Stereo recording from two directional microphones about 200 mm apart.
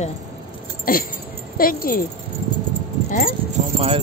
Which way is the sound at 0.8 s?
45° left (ahead or behind).